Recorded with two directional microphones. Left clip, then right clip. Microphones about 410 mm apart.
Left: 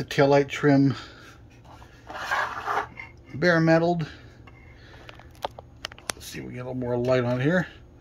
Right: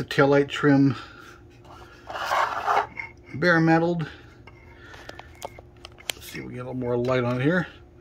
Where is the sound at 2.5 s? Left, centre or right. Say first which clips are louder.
Right 5 dB; centre.